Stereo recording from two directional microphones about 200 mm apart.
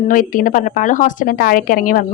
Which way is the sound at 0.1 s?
40° left (ahead or behind).